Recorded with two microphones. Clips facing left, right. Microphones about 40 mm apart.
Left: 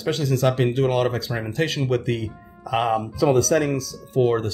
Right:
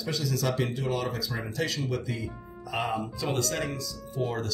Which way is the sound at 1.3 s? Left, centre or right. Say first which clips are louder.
Left 7 dB; left.